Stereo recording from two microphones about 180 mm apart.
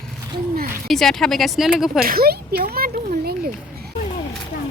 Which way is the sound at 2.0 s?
55° right (ahead or behind).